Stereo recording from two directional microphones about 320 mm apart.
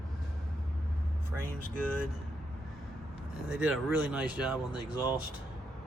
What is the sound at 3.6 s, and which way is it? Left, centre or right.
Speech, centre.